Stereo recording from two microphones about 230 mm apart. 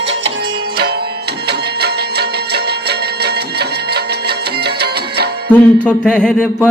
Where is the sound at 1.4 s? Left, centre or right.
Right.